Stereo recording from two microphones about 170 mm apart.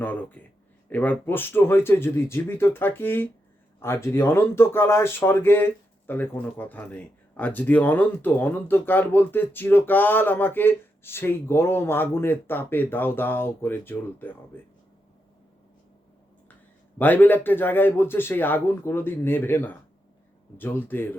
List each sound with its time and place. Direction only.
0.0 s speech: 10° left (ahead or behind)
17.0 s speech: 10° left (ahead or behind)